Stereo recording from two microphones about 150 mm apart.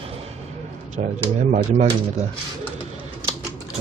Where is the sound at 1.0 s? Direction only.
50° right (ahead or behind).